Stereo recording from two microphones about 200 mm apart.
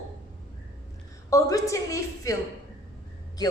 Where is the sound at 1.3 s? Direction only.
15° left (ahead or behind).